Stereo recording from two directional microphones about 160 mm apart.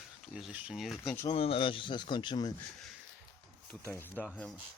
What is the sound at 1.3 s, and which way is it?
Speech, 35° left (ahead or behind).